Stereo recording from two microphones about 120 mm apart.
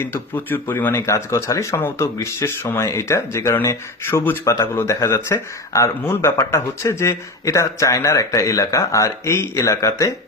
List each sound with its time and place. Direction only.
0.0 s speech: 15° left (ahead or behind)